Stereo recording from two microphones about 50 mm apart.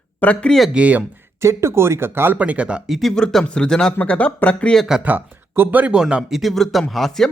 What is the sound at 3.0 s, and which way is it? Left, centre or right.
Speech, centre.